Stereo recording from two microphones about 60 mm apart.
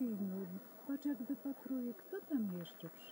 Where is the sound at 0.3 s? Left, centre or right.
Centre.